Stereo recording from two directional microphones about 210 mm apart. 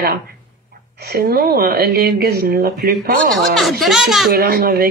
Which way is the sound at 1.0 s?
50° right (ahead or behind).